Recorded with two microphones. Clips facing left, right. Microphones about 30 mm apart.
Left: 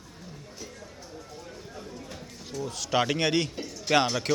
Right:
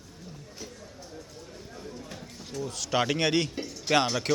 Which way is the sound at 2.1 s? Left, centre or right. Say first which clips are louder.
Left 1 dB; centre.